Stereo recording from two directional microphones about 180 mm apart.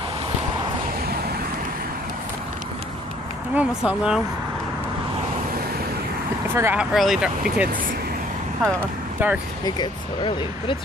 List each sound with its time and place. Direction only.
3.5 s speech: 5° right (ahead or behind)
6.5 s speech: 10° right (ahead or behind)
9.2 s speech: 10° right (ahead or behind)
9.8 s speech: 25° left (ahead or behind)